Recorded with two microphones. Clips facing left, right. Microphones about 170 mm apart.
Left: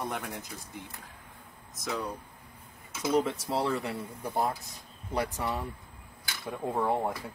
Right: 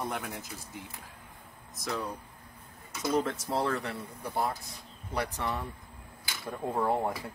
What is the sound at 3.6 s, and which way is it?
Speech, 15° left (ahead or behind).